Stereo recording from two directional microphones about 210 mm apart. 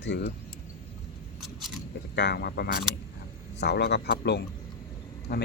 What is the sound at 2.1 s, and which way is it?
Speech, 50° left (ahead or behind).